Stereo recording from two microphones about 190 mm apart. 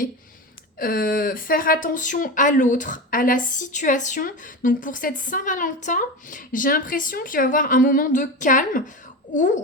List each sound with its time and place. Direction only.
0.8 s speech: 50° left (ahead or behind)